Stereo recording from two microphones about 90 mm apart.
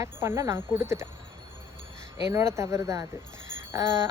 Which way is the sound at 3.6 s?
30° right (ahead or behind).